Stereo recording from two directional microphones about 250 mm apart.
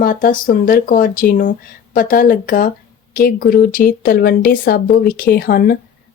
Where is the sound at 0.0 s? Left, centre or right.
Left.